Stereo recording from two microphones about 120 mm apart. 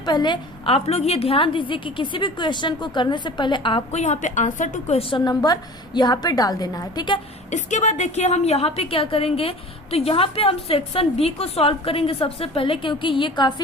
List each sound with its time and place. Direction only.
0.0 s a woman's voice: 35° left (ahead or behind)
3.9 s a woman's voice: 75° left (ahead or behind); by 4.9 s 90° left
4.9 s a woman's voice: 45° left (ahead or behind)
7.5 s a woman's voice: 80° left; by 13.5 s 40° left (ahead or behind)